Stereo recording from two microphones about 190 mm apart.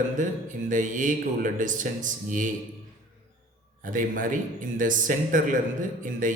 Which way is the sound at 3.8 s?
45° right (ahead or behind).